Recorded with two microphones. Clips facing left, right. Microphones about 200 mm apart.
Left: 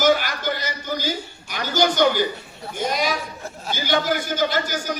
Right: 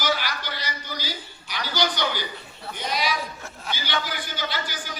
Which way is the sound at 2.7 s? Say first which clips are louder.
Left 4 dB; 45° left (ahead or behind).